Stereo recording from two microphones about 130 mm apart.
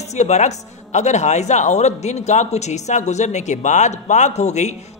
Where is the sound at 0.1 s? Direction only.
60° left (ahead or behind).